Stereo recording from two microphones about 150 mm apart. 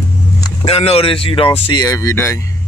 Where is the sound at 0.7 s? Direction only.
45° left (ahead or behind).